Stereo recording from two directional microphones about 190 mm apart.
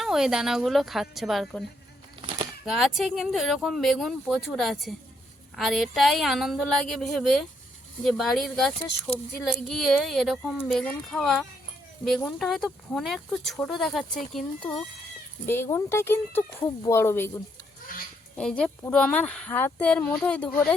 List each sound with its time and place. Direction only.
0.0 s speech: centre (ahead or behind)
2.6 s speech: centre (ahead or behind)
15.4 s speech: 10° left (ahead or behind)
17.9 s honk: 45° left (ahead or behind)
18.3 s speech: 5° left (ahead or behind)